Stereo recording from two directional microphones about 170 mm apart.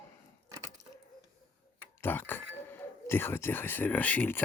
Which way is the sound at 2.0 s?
10° left (ahead or behind).